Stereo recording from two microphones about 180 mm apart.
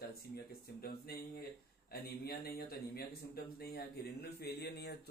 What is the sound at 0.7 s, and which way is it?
Speech, 60° left (ahead or behind).